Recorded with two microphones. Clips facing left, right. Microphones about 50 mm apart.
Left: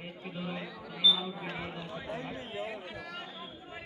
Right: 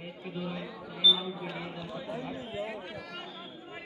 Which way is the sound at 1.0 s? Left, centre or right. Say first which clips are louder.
Right 2 dB; centre.